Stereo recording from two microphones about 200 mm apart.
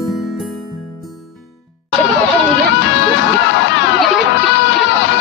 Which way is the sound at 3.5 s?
65° left (ahead or behind).